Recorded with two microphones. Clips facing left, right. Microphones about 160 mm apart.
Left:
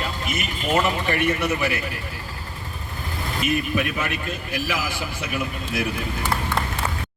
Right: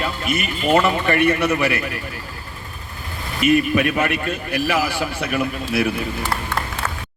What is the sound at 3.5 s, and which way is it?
A man's voice, 65° right (ahead or behind).